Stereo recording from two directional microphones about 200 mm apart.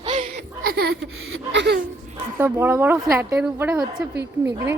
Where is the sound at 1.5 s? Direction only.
55° right (ahead or behind).